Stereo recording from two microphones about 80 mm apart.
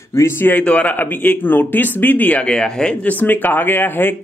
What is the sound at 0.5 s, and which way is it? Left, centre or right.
Speech, centre.